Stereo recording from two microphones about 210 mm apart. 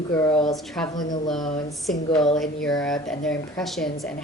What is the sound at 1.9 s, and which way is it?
Speech, centre (ahead or behind).